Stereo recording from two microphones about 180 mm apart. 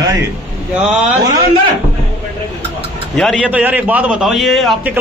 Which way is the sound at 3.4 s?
10° right (ahead or behind).